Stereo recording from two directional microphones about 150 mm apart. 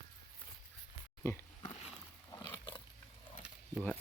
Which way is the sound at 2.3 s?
20° left (ahead or behind).